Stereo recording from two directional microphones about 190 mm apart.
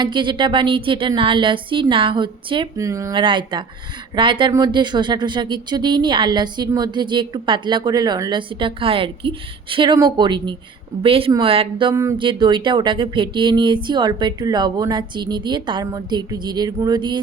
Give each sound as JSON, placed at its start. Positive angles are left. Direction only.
{"t": 0.0, "sound": "speech", "side_deg": -25}
{"t": 11.9, "sound": "a sound", "side_deg": -15}
{"t": 12.2, "sound": "speech", "side_deg": -25}